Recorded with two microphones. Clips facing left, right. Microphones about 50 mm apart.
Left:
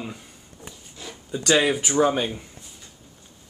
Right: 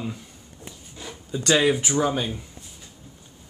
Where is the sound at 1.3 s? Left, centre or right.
Centre.